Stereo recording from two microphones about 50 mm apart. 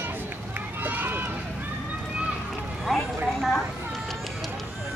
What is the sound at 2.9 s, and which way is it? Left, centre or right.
Speech, centre.